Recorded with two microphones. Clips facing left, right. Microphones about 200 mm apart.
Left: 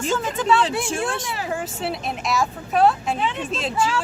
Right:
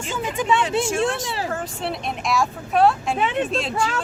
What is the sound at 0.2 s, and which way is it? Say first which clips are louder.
Speech: left 1 dB; 15° right (ahead or behind).